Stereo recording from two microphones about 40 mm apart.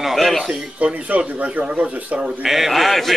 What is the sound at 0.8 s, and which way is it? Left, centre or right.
A man's voice, right.